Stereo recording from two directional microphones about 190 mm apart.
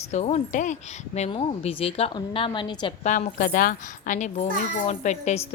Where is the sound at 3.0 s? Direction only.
40° left (ahead or behind).